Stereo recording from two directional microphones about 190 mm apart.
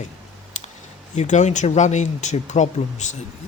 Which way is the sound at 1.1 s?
40° left (ahead or behind).